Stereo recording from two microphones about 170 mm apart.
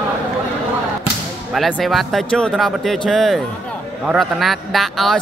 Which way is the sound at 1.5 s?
Centre (ahead or behind).